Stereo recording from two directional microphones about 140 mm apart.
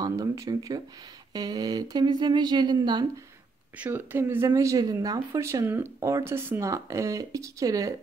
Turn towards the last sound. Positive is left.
turn(degrees=-25)  # may be behind; listen again after turning